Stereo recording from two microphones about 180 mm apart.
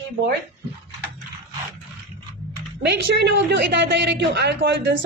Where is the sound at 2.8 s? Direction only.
75° right (ahead or behind).